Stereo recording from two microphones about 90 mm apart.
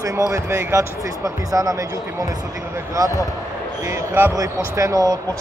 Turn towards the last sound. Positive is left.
turn(degrees=-45)  # may be behind; listen again after turning